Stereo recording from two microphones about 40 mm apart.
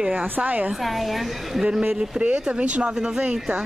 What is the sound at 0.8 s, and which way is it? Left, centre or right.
Speech, centre.